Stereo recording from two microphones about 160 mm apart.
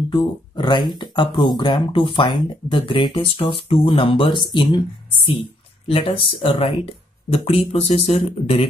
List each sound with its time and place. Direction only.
0.1 s speech: 30° left (ahead or behind)